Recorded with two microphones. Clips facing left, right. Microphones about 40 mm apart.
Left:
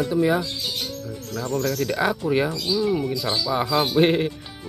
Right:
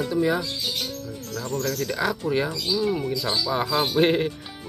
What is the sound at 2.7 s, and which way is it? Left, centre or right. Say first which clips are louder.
Speech: left 2 dB; centre.